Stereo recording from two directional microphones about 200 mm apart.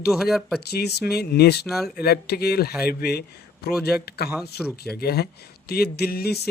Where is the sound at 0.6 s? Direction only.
55° left (ahead or behind).